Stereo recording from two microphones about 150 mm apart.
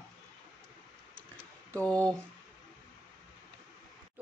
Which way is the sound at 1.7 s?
10° left (ahead or behind).